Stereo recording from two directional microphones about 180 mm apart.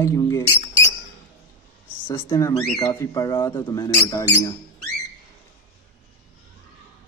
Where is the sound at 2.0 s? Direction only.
25° left (ahead or behind).